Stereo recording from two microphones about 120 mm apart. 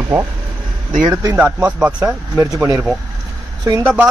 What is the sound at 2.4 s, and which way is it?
Speech, 30° right (ahead or behind).